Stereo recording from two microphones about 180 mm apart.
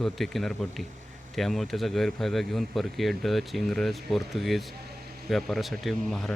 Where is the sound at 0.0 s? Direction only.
Centre (ahead or behind).